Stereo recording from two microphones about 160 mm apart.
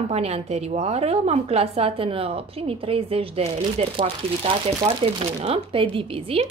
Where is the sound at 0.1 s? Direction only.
40° right (ahead or behind).